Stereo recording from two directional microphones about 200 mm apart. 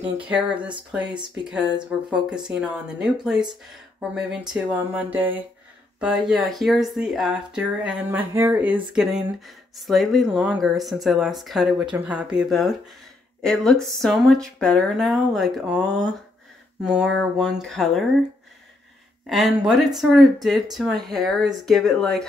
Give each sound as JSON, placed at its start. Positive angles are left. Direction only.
{"t": 0.2, "sound": "speech", "side_deg": -5}
{"t": 1.0, "sound": "speech", "side_deg": -20}
{"t": 1.5, "sound": "speech", "side_deg": -5}
{"t": 4.1, "sound": "a sound", "side_deg": -5}
{"t": 5.9, "sound": "speech", "side_deg": 0}
{"t": 19.2, "sound": "speech", "side_deg": 0}